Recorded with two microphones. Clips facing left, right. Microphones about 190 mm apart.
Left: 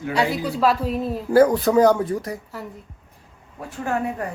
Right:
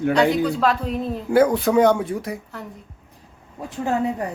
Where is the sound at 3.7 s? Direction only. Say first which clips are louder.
Right 3 dB; 20° right (ahead or behind).